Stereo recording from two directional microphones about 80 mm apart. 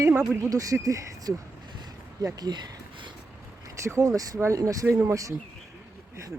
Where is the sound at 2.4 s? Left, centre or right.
Right.